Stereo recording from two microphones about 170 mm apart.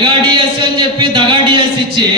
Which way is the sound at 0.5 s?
30° right (ahead or behind).